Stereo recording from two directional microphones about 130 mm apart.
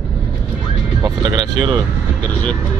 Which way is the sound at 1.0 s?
35° right (ahead or behind).